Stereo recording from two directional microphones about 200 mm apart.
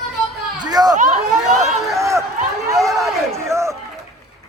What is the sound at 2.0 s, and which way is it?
Run, 15° right (ahead or behind).